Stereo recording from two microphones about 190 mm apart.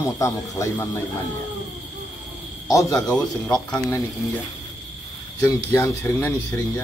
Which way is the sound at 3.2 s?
5° left (ahead or behind).